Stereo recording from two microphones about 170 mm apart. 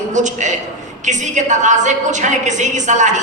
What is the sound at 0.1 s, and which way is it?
A man's voice, 45° right (ahead or behind).